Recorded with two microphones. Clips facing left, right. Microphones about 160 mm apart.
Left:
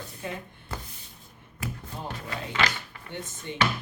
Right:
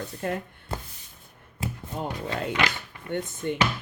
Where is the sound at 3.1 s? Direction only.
55° right (ahead or behind).